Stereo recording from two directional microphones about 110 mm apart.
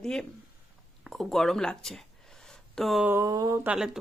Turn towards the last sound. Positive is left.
turn(degrees=-5)  # may be behind; listen again after turning